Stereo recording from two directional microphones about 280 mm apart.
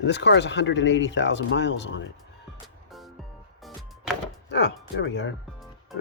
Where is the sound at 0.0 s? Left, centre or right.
Left.